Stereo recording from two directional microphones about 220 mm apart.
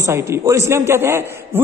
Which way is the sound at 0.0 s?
10° right (ahead or behind).